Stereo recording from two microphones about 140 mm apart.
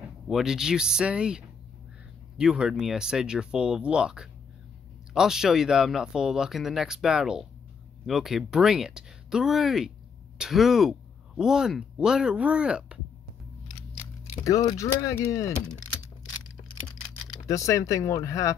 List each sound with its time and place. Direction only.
0.3 s speech: 5° right (ahead or behind)
14.4 s speech: 25° left (ahead or behind)
15.6 s typing: 5° left (ahead or behind)
17.5 s speech: 25° left (ahead or behind)